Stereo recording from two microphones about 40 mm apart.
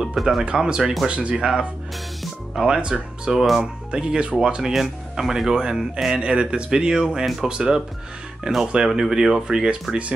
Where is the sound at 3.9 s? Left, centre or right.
Right.